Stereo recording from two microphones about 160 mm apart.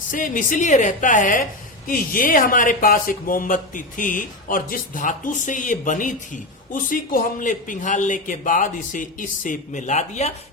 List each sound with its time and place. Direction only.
0.1 s speech: 55° left (ahead or behind)